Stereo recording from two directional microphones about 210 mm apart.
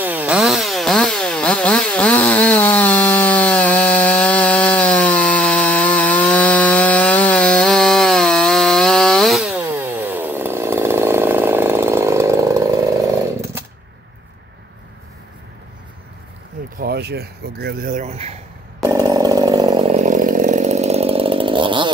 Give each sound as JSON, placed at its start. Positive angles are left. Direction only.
{"t": 0.0, "sound": "chainsaw", "side_deg": -10}
{"t": 16.7, "sound": "speech", "side_deg": -50}
{"t": 18.9, "sound": "chainsaw", "side_deg": -15}